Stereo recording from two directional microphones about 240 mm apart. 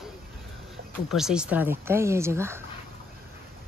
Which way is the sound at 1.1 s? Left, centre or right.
Centre.